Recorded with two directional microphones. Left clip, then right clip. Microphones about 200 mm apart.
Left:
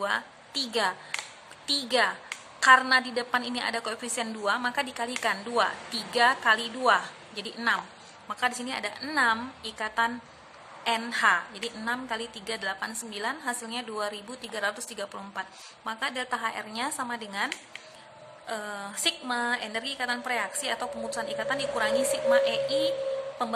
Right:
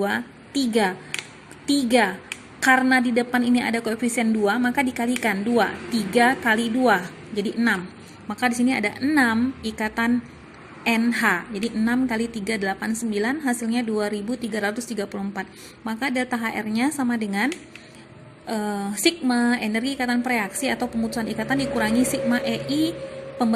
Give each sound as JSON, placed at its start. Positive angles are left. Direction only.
{"t": 0.0, "sound": "a woman's voice", "side_deg": -10}